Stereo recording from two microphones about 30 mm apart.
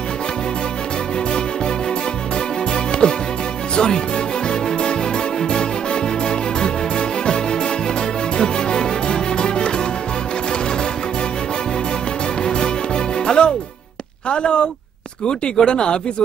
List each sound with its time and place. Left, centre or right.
3.0 s music: left
3.7 s speech: left
4.5 s music: left
8.4 s music: left
12.4 s music: left
14.3 s a sound: left
15.2 s speech: left